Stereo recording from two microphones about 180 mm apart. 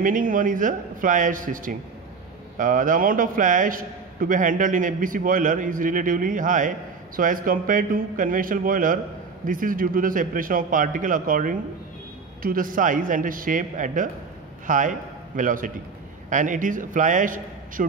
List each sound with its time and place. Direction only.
0.0 s a man's voice: 50° right (ahead or behind)